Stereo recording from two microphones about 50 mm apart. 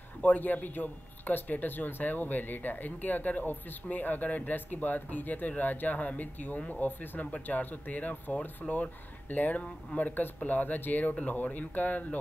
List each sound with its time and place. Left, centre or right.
0.2 s speech: left